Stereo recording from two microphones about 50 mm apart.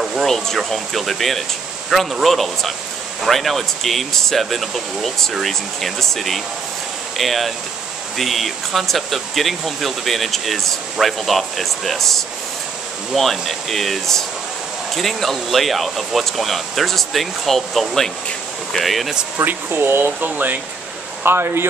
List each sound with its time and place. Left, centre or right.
0.0 s a sound: centre
0.6 s speech: centre
19.3 s speech: right
20.2 s speech: right
21.2 s speech: right